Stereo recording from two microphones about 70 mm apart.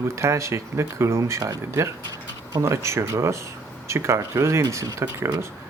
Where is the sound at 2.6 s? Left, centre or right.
Right.